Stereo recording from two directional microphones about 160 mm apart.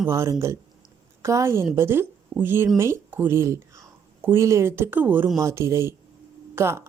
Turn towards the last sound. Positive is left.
turn(degrees=-15)  # may be behind; listen again after turning